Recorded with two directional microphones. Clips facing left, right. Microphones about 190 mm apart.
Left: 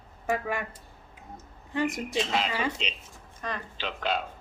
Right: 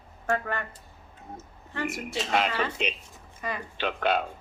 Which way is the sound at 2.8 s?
55° right (ahead or behind).